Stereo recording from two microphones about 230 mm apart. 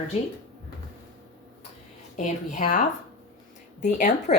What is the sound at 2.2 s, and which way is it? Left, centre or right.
A woman's voice, left.